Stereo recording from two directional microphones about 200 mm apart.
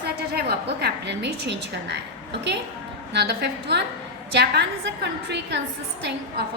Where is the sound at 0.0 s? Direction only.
55° right (ahead or behind).